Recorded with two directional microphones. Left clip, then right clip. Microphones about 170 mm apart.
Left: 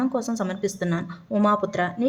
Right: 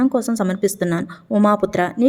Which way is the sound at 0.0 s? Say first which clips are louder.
Right 7 dB; 35° right (ahead or behind).